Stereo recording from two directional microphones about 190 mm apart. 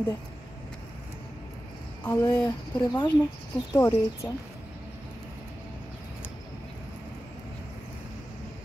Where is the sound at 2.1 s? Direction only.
15° left (ahead or behind).